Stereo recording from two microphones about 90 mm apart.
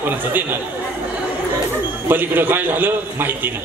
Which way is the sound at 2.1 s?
20° right (ahead or behind).